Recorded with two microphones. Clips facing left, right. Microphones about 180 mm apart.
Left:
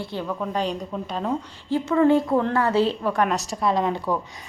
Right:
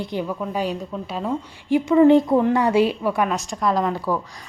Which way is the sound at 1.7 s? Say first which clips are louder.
Right 5 dB; 15° right (ahead or behind).